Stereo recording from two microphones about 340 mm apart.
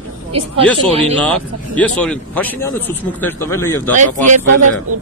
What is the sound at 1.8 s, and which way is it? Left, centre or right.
Speech, centre.